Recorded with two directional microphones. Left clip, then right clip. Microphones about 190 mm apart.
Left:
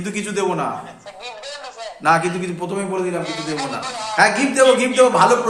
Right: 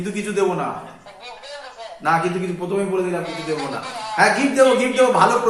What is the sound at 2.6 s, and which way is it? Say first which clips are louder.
Speech: right 1 dB; 55° left (ahead or behind).